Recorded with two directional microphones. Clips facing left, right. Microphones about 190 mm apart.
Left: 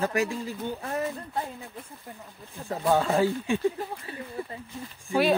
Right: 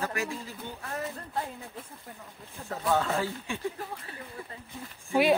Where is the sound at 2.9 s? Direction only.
30° left (ahead or behind).